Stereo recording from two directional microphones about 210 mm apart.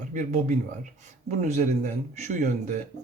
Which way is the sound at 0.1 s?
35° right (ahead or behind).